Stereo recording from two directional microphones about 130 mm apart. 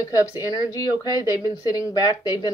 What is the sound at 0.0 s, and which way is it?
Speech, 25° left (ahead or behind).